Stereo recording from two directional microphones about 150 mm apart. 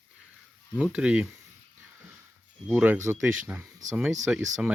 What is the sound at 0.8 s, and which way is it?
Speech, 10° right (ahead or behind).